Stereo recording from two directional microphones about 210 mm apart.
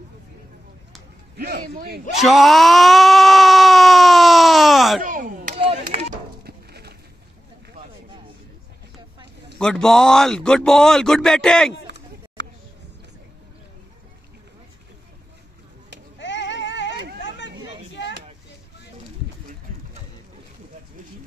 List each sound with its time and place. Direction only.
1.3 s a man's voice: 50° right (ahead or behind)
2.1 s screaming: centre (ahead or behind)
5.0 s chop: 40° right (ahead or behind)
5.6 s chop: 30° right (ahead or behind)
6.4 s a sound: 50° right (ahead or behind)
9.6 s speech: 5° left (ahead or behind)
16.2 s child singing: 60° left (ahead or behind)